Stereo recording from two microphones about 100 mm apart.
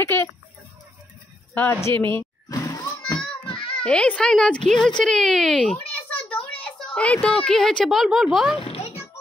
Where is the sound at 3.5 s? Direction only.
60° left (ahead or behind).